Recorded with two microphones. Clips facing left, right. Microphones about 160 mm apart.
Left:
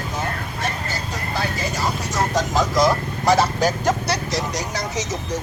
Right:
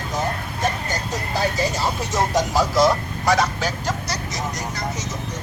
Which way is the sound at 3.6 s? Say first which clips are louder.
Left 6 dB; 55° left (ahead or behind).